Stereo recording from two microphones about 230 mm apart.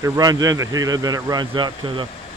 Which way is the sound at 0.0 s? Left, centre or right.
Centre.